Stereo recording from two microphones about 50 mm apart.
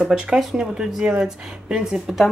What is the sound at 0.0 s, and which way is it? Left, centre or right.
Speech, centre.